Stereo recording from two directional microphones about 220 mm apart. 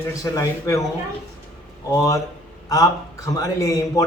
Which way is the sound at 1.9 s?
15° left (ahead or behind).